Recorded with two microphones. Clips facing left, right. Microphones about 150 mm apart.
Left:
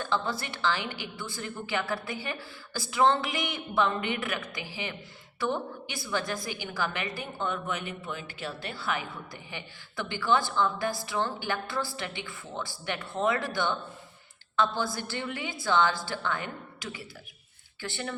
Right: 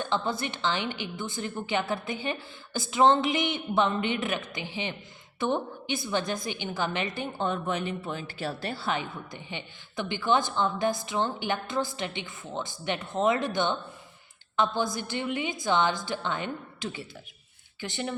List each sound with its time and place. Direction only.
0.0 s a woman's voice: 20° right (ahead or behind)